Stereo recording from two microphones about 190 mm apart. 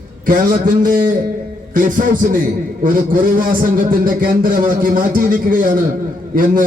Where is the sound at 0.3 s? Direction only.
45° right (ahead or behind).